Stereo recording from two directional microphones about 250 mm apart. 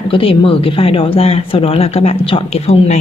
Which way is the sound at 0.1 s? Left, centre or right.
Left.